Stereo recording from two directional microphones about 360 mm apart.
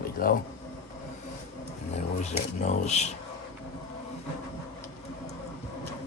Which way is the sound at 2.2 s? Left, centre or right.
Centre.